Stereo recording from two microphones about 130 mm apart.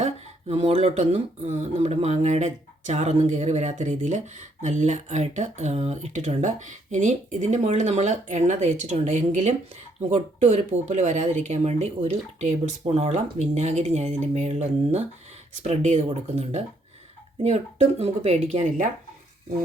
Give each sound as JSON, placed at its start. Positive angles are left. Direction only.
{"t": 0.0, "sound": "speech", "side_deg": -55}
{"t": 16.0, "sound": "speech", "side_deg": -55}